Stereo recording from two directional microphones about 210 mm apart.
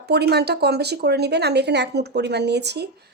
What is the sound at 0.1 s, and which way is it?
Speech, 50° right (ahead or behind).